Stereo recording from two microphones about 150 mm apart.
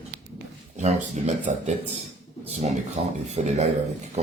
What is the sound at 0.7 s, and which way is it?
Speech, 50° right (ahead or behind).